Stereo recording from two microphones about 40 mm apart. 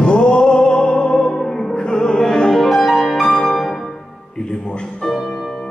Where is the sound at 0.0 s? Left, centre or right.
Left.